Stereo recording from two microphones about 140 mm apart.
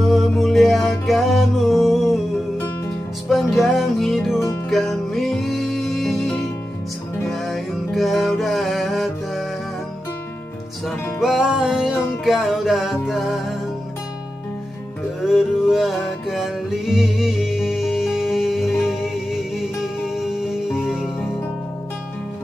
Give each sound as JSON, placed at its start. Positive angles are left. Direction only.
{"t": 0.0, "sound": "music", "side_deg": 0}
{"t": 3.3, "sound": "music", "side_deg": 0}
{"t": 11.1, "sound": "music", "side_deg": 0}
{"t": 15.2, "sound": "music", "side_deg": 0}